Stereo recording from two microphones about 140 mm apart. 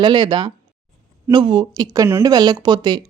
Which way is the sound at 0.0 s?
30° right (ahead or behind).